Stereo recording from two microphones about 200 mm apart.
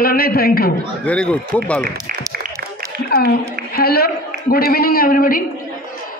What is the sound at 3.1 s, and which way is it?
A woman's voice, 50° left (ahead or behind).